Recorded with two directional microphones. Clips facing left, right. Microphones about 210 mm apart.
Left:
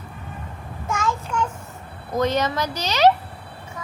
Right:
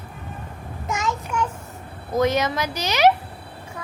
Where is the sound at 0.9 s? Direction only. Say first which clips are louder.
Left 1 dB; 20° right (ahead or behind).